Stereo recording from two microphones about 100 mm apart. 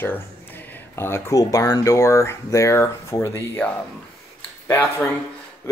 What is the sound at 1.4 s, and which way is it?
Speech, 35° left (ahead or behind).